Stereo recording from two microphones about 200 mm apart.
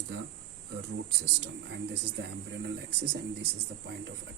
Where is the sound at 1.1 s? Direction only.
60° right (ahead or behind).